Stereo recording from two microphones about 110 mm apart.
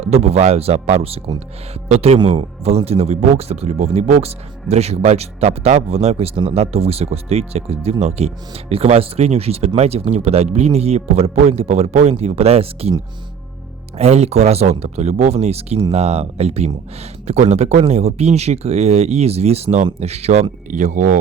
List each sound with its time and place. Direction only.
0.0 s speech: 70° right (ahead or behind)
13.9 s speech: 80° right